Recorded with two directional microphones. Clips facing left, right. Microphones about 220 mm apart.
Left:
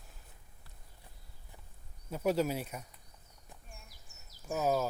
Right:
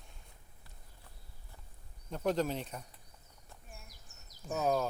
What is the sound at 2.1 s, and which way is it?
Speech, 5° left (ahead or behind).